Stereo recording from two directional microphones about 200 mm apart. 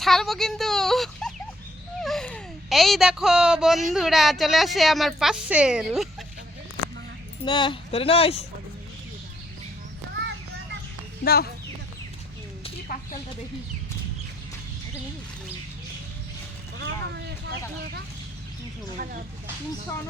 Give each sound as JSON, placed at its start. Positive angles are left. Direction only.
{"t": 0.0, "sound": "speech", "side_deg": 0}
{"t": 7.4, "sound": "speech", "side_deg": 25}
{"t": 11.2, "sound": "speech", "side_deg": 50}
{"t": 12.9, "sound": "a sound", "side_deg": 45}
{"t": 16.7, "sound": "vehicle", "side_deg": -60}